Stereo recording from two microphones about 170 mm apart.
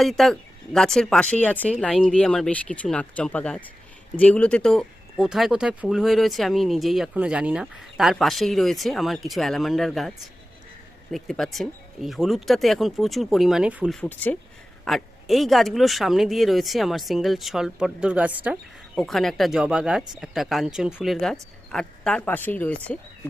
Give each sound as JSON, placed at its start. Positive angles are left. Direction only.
{"t": 0.0, "sound": "speech", "side_deg": 0}
{"t": 13.9, "sound": "speech", "side_deg": 10}
{"t": 18.9, "sound": "speech", "side_deg": 0}